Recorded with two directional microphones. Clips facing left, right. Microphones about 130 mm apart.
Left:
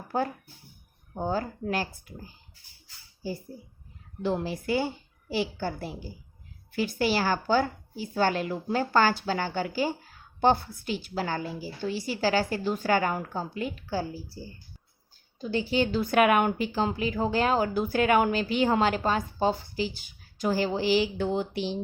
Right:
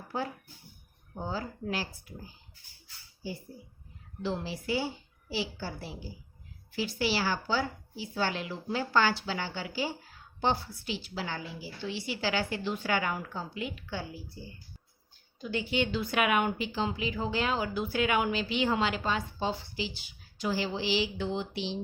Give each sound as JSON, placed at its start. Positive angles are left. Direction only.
{"t": 1.2, "sound": "a woman's voice", "side_deg": 50}
{"t": 4.2, "sound": "a woman's voice", "side_deg": 50}